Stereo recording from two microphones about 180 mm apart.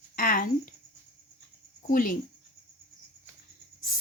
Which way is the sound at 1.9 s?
50° left (ahead or behind).